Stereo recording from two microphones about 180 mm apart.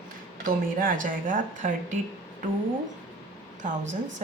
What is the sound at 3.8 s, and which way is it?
Speech, 90° right.